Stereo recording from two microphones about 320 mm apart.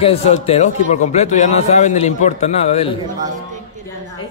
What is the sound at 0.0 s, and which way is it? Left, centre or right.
A man's voice, centre.